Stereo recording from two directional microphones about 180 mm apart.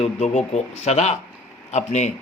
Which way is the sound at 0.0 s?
35° left (ahead or behind).